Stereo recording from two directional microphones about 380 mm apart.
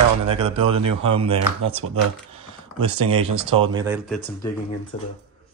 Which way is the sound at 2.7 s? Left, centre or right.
Right.